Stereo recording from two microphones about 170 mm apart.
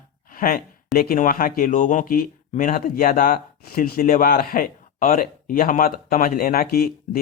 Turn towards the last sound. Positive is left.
turn(degrees=65)  # may be behind; listen again after turning